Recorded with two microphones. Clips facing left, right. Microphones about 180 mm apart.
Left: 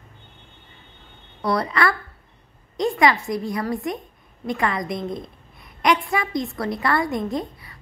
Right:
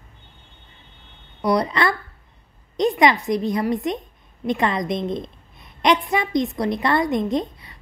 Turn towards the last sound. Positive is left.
turn(degrees=-20)  # may be behind; listen again after turning